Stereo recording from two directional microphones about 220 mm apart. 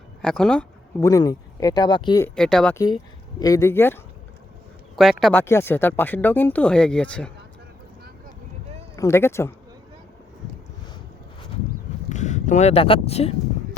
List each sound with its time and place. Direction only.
0.2 s speech: 5° left (ahead or behind)
1.0 s speech: 15° left (ahead or behind)
2.3 s speech: 5° left (ahead or behind)
2.7 s speech: 20° left (ahead or behind)
9.0 s speech: 10° left (ahead or behind)
12.0 s speech: 30° left (ahead or behind)